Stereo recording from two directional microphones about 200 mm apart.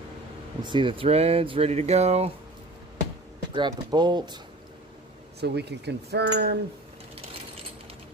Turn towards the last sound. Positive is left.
turn(degrees=-55)  # may be behind; listen again after turning